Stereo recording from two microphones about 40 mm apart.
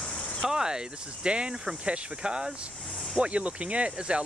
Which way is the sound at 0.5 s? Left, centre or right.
Centre.